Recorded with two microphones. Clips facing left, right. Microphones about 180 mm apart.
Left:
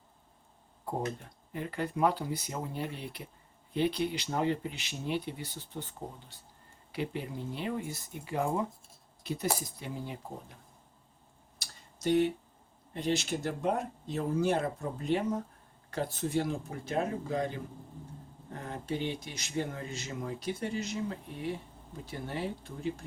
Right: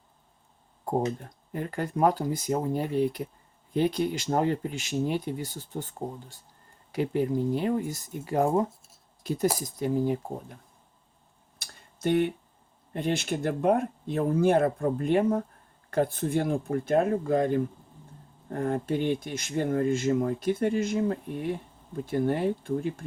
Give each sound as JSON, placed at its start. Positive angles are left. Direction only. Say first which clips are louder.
{"t": 1.5, "sound": "speech", "louder": "right 4 dB", "side_deg": -45}
{"t": 11.6, "sound": "a sound", "louder": "right 4 dB", "side_deg": -55}
{"t": 12.9, "sound": "speech", "louder": "right 3 dB", "side_deg": -55}